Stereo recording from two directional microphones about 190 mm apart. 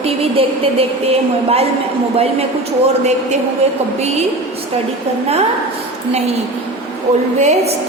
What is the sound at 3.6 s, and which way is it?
Speech, 35° right (ahead or behind).